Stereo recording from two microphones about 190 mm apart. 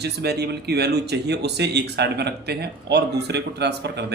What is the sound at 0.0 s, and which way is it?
Speech, 60° right (ahead or behind).